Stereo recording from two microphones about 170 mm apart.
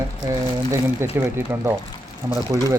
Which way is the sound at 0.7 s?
15° right (ahead or behind).